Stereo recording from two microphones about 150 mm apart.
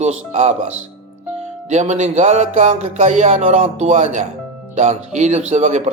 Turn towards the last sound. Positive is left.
turn(degrees=-50)  # may be behind; listen again after turning